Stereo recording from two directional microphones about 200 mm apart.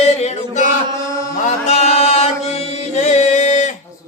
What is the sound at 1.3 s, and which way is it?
Chant, 30° left (ahead or behind).